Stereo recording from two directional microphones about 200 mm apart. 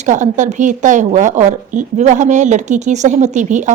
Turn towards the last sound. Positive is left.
turn(degrees=-35)  # may be behind; listen again after turning